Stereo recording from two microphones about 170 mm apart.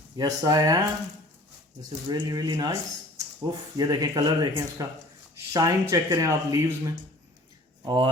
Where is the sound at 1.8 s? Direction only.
25° right (ahead or behind).